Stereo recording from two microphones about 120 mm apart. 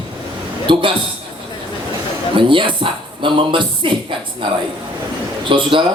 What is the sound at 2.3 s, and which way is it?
Speech, 45° right (ahead or behind).